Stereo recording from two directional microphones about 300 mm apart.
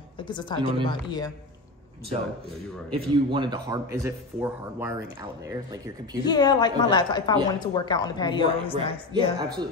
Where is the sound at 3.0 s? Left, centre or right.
Centre.